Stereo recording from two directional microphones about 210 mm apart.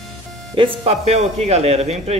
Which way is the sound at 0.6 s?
30° right (ahead or behind).